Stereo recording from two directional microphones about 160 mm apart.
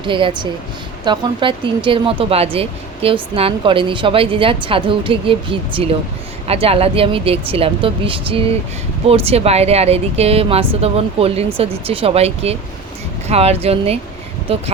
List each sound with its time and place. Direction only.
0.0 s speech: 30° right (ahead or behind)